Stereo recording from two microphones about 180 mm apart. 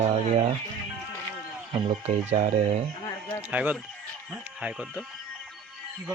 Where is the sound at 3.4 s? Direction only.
10° right (ahead or behind).